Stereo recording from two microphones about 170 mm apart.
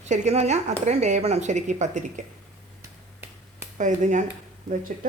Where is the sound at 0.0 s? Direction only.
45° right (ahead or behind).